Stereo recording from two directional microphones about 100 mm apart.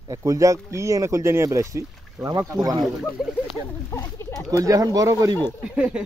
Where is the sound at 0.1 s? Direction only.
35° right (ahead or behind).